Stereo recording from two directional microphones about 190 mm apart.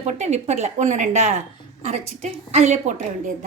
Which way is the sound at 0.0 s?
35° right (ahead or behind).